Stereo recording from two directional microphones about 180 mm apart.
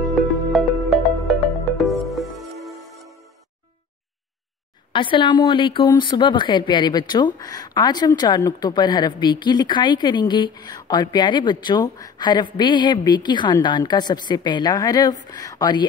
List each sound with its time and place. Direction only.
0.1 s music: centre (ahead or behind)
4.9 s speech: 25° left (ahead or behind)